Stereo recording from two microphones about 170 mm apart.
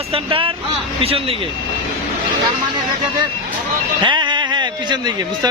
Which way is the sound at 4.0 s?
25° right (ahead or behind).